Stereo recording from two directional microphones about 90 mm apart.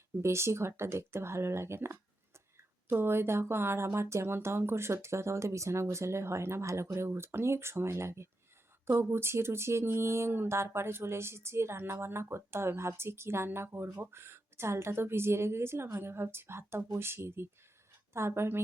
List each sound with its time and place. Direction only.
0.2 s speech: 30° right (ahead or behind)